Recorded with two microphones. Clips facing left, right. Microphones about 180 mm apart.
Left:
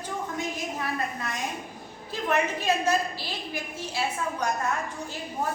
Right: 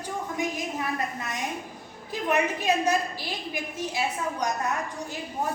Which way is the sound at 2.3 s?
15° right (ahead or behind).